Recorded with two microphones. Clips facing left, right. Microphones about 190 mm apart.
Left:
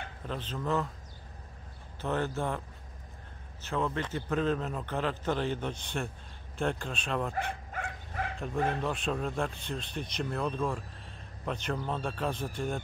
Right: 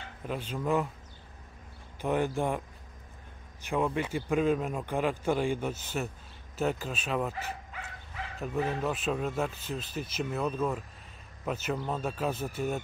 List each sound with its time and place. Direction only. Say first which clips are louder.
0.3 s a man's voice: right 3 dB; 10° right (ahead or behind)
2.0 s a man's voice: right 3 dB; 15° right (ahead or behind)
3.6 s a man's voice: right 3 dB; 15° right (ahead or behind)
7.7 s dog: left 5 dB; 50° left (ahead or behind)
8.4 s speech: right 1 dB; 5° right (ahead or behind)